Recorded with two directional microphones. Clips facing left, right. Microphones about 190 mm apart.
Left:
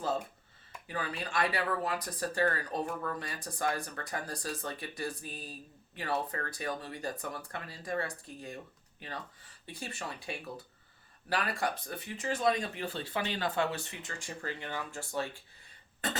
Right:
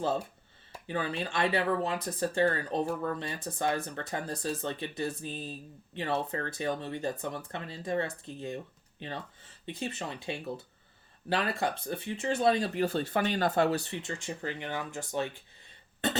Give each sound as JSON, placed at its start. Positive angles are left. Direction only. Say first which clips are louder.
{"t": 0.7, "sound": "speech", "louder": "right 5 dB", "side_deg": -25}